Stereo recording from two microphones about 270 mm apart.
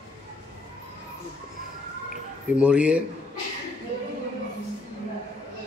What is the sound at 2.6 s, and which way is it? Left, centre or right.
Speech, centre.